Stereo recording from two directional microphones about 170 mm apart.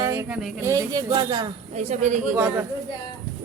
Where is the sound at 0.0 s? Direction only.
15° right (ahead or behind).